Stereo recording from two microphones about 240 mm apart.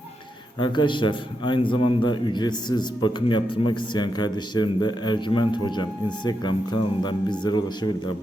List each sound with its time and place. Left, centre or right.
0.6 s a man's voice: centre